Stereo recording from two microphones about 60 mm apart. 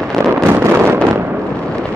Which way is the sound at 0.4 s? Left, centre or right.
Right.